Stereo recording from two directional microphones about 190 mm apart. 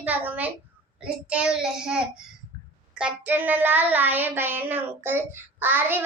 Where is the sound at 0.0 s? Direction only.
10° right (ahead or behind).